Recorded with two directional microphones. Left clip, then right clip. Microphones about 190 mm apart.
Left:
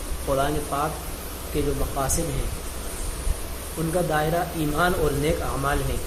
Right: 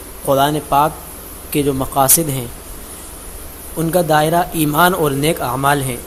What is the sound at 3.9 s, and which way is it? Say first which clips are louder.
Speech: right 10 dB; 55° right (ahead or behind).